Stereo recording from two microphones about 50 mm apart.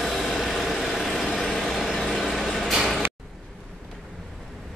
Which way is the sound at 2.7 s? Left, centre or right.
Centre.